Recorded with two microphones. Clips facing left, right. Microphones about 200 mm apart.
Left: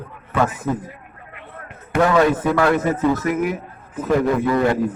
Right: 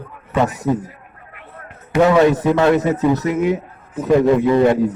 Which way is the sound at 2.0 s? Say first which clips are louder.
Right 4 dB; 20° right (ahead or behind).